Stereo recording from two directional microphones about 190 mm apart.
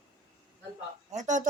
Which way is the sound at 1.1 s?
40° right (ahead or behind).